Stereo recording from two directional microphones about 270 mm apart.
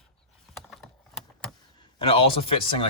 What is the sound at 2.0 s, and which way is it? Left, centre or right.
Speech, left.